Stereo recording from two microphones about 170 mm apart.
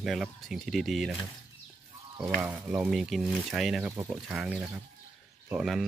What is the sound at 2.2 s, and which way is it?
Speech, 10° right (ahead or behind).